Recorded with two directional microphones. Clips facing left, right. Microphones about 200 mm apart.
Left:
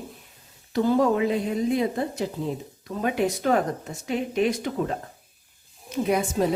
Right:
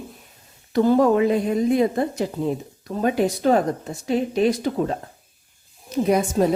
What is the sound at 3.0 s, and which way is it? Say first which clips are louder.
Speech: right 4 dB; 35° right (ahead or behind).